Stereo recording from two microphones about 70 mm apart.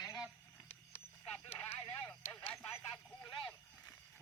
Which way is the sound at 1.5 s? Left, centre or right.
Left.